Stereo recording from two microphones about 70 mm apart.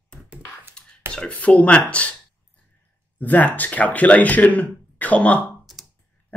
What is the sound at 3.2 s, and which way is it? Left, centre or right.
Speech, left.